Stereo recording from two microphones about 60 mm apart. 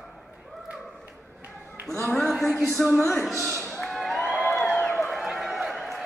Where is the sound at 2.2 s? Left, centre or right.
Centre.